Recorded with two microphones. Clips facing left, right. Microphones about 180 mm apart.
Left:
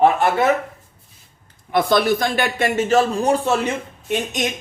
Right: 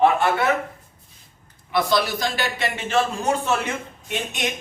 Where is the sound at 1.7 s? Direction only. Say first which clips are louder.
Left 5 dB; 55° left (ahead or behind); by 3.6 s 35° left (ahead or behind).